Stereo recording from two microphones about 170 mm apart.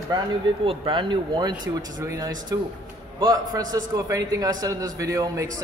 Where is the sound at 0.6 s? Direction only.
30° right (ahead or behind).